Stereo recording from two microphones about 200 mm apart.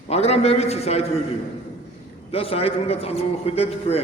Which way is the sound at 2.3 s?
30° left (ahead or behind).